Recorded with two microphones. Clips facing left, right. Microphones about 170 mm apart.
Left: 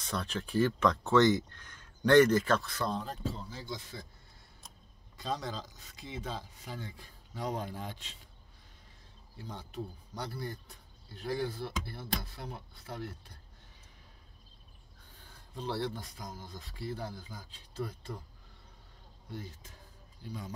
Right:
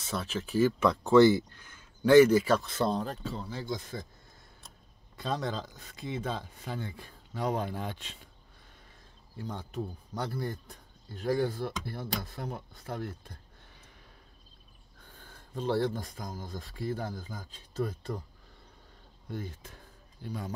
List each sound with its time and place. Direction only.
0.0 s speech: 5° right (ahead or behind)
2.6 s speech: 25° right (ahead or behind)
3.0 s speech: 65° right (ahead or behind); by 4.0 s 45° right (ahead or behind)
5.1 s speech: 55° right (ahead or behind)
9.5 s speech: 50° right (ahead or behind)
15.5 s speech: 45° right (ahead or behind)
19.3 s speech: 55° right (ahead or behind)